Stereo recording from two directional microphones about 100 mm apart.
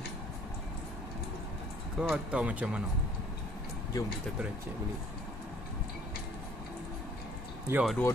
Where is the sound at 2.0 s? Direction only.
10° right (ahead or behind).